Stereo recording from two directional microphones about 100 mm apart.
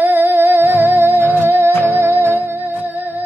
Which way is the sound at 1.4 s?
25° right (ahead or behind).